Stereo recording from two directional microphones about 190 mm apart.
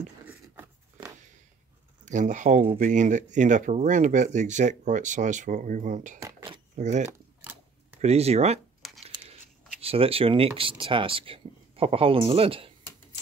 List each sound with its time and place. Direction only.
0.2 s a sound: 10° right (ahead or behind)
2.0 s speech: 40° right (ahead or behind)
6.2 s dishes: 25° right (ahead or behind)
6.7 s speech: 40° right (ahead or behind)
7.1 s typewriter: 10° right (ahead or behind)
8.0 s speech: 35° right (ahead or behind)
8.8 s tearing: centre (ahead or behind)
9.8 s speech: 30° right (ahead or behind)